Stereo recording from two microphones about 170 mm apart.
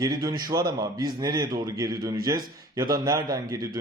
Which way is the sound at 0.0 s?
20° right (ahead or behind).